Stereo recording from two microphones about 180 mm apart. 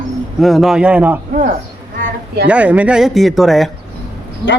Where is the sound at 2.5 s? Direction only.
5° right (ahead or behind).